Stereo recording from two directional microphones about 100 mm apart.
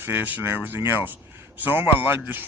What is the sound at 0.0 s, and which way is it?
Speech, 15° right (ahead or behind).